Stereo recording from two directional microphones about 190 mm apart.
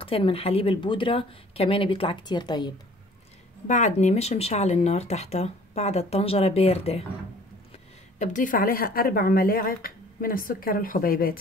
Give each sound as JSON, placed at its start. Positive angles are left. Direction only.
{"t": 0.0, "sound": "speech", "side_deg": 30}
{"t": 3.6, "sound": "speech", "side_deg": 40}
{"t": 8.2, "sound": "speech", "side_deg": 40}